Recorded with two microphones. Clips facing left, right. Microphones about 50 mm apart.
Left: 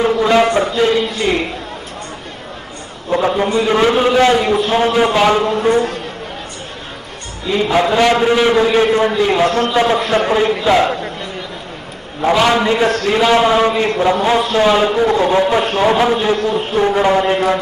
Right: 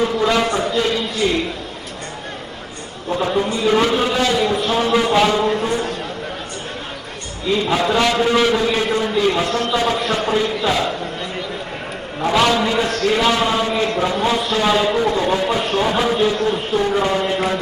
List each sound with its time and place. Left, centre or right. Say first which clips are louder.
0.0 s a man's voice: left 5 dB; left
3.1 s a man's voice: left 4 dB; left
7.6 s a man's voice: left 5 dB; left
8.5 s a man's voice: left 6 dB; left
12.5 s a man's voice: left 4 dB; left